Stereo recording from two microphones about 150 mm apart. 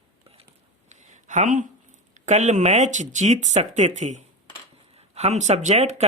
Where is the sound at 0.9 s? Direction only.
55° right (ahead or behind).